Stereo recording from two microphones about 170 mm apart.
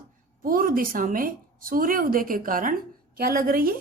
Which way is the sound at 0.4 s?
55° right (ahead or behind).